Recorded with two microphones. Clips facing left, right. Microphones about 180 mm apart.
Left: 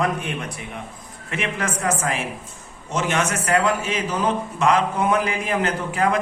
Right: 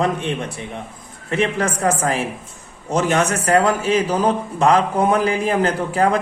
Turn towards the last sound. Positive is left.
turn(degrees=-35)  # may be behind; listen again after turning